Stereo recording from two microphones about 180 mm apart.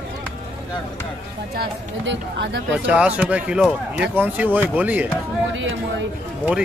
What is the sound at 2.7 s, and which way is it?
Speech, 5° right (ahead or behind).